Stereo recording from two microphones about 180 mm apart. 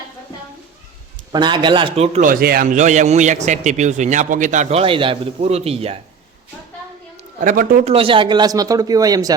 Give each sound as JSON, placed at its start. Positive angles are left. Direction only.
{"t": 1.3, "sound": "speech", "side_deg": -25}
{"t": 2.2, "sound": "a man's voice", "side_deg": -55}
{"t": 7.3, "sound": "a man's voice", "side_deg": -50}
{"t": 7.9, "sound": "speech", "side_deg": -30}